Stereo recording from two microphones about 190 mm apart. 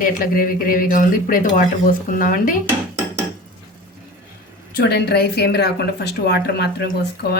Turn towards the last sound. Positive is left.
turn(degrees=60)  # may be behind; listen again after turning